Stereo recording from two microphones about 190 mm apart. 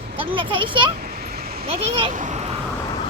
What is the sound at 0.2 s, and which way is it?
A child's voice, 25° right (ahead or behind).